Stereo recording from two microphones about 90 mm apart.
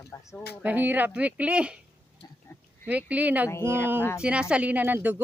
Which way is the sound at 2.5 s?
25° left (ahead or behind).